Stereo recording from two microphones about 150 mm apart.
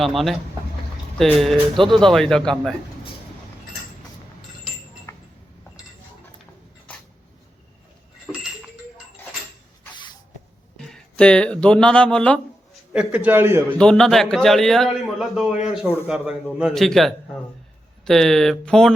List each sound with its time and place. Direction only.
0.0 s a man's voice: centre (ahead or behind)
5.1 s a sound: 20° left (ahead or behind)
9.9 s a sound: 30° left (ahead or behind)
10.8 s speech: 5° left (ahead or behind)
12.9 s a man's voice: 10° right (ahead or behind)
13.7 s a man's voice: 5° left (ahead or behind)